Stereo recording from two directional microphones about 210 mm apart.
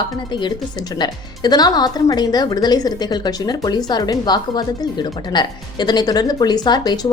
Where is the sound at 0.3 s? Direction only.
20° left (ahead or behind).